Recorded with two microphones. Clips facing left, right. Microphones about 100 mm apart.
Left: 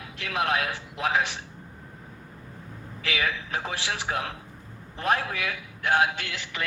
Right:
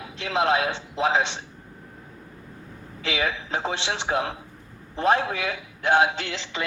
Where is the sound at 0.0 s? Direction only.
25° right (ahead or behind).